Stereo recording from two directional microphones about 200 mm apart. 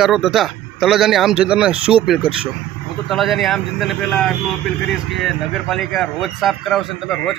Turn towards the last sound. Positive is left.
turn(degrees=0)  # may be behind; listen again after turning